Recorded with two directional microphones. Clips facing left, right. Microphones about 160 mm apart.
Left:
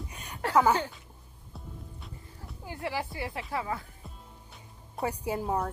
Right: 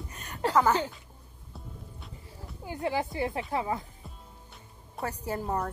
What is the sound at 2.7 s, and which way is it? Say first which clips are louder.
Speech: right 4 dB; 20° right (ahead or behind).